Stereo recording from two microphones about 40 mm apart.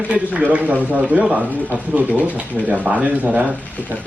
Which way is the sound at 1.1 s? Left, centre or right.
Right.